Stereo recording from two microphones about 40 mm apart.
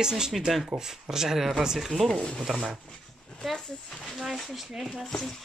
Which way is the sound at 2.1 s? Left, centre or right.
Centre.